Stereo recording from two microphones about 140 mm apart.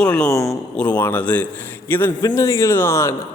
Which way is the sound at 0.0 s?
10° left (ahead or behind).